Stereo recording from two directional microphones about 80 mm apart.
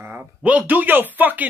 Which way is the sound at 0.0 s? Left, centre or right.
Right.